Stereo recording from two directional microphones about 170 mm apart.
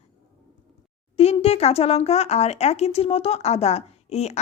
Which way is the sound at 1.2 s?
35° left (ahead or behind).